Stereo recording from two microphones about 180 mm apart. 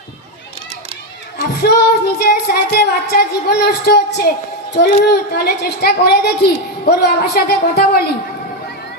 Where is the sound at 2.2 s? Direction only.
60° left (ahead or behind).